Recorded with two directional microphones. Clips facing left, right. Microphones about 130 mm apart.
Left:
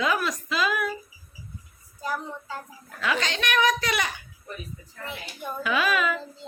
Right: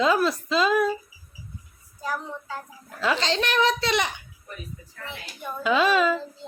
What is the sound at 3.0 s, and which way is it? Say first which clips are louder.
A child's voice: right 3 dB; 30° right (ahead or behind).